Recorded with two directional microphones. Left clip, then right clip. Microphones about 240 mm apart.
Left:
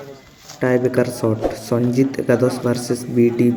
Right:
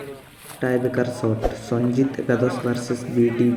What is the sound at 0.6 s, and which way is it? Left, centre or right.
Speech, centre.